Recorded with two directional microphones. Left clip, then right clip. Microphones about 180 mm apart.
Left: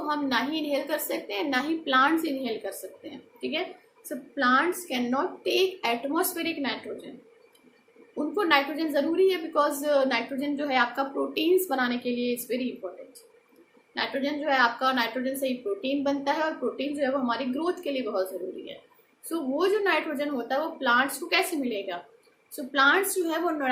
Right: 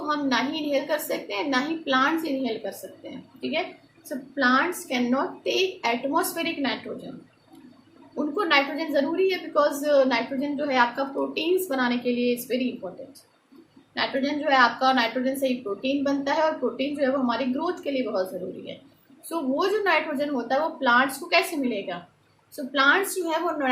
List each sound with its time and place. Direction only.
0.1 s a woman's voice: 15° left (ahead or behind)
4.4 s a woman's voice: 15° left (ahead or behind)
8.4 s a woman's voice: 15° left (ahead or behind)
13.9 s a woman's voice: 10° left (ahead or behind)
19.3 s a woman's voice: 15° left (ahead or behind)